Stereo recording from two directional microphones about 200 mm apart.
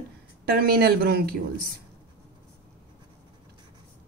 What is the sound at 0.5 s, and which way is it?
Speech, 50° right (ahead or behind).